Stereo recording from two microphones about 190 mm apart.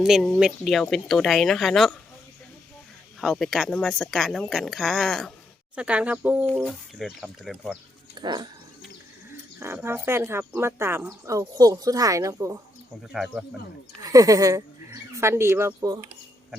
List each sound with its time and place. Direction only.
0.0 s speech: centre (ahead or behind)
3.2 s speech: centre (ahead or behind)
6.4 s speech: 5° left (ahead or behind)
8.1 s dog: 20° right (ahead or behind)
9.6 s speech: 10° right (ahead or behind)
13.0 s speech: centre (ahead or behind)
14.0 s speech: 20° right (ahead or behind)